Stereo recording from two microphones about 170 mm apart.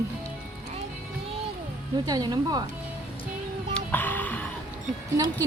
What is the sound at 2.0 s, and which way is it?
Speech, 25° right (ahead or behind).